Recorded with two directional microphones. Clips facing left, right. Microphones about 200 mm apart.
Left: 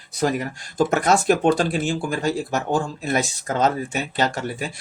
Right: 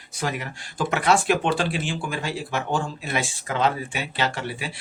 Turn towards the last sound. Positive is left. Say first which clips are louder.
# left 3 dB
turn(degrees=45)  # may be behind; listen again after turning